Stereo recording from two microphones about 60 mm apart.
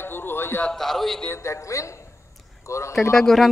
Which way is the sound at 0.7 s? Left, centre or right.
Centre.